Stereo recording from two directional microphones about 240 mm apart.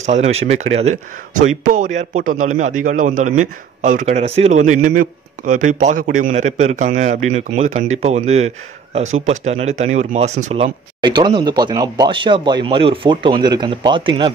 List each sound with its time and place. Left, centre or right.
0.0 s a man's voice: right